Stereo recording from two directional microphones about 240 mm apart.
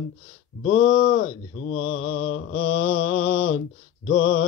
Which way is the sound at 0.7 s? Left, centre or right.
Left.